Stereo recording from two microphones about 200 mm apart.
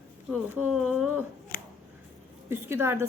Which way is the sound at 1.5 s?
50° left (ahead or behind).